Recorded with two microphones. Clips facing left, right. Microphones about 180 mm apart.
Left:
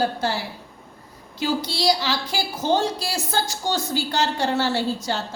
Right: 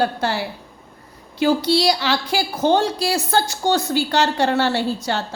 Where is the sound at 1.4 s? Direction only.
65° right (ahead or behind).